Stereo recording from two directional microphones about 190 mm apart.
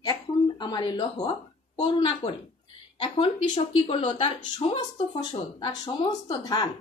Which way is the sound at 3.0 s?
25° left (ahead or behind).